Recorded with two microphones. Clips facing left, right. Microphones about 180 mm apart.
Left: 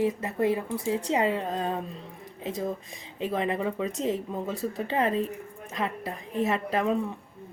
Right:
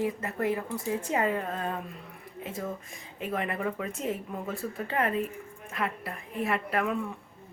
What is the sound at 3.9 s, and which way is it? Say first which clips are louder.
A woman's voice: left 4 dB; 35° left (ahead or behind).